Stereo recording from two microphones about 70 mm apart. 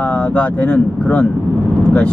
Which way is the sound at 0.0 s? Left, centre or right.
Centre.